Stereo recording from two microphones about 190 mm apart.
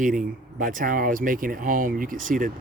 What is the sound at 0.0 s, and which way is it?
Speech, 45° right (ahead or behind).